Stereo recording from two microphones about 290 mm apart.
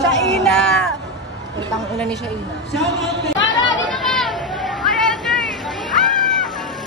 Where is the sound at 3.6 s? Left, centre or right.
Left.